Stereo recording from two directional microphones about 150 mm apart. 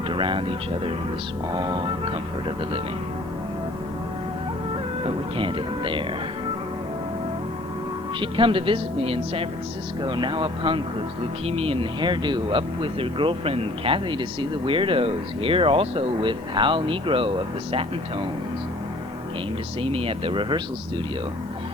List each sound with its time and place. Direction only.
0.1 s speech: 35° right (ahead or behind)
5.0 s speech: 35° right (ahead or behind)
8.2 s speech: 35° right (ahead or behind)
19.9 s speech: 40° right (ahead or behind)